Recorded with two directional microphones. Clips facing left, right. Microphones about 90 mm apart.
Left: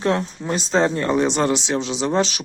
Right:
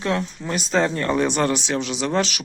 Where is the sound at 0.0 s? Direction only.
30° left (ahead or behind).